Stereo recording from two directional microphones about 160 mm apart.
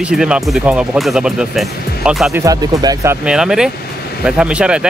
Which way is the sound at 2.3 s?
20° right (ahead or behind).